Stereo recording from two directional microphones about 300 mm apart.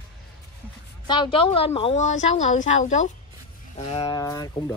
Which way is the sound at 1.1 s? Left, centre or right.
Centre.